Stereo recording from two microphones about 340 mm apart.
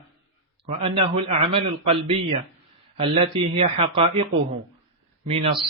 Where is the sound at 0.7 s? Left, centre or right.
Centre.